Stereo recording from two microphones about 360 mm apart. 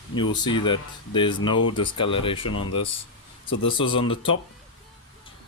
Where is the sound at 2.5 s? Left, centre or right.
Left.